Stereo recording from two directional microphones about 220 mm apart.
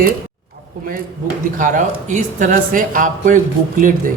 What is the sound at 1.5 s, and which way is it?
Speech, 35° right (ahead or behind).